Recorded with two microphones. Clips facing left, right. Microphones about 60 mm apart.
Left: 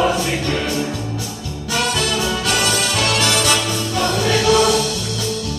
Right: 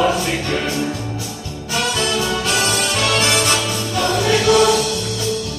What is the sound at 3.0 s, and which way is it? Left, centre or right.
Music, right.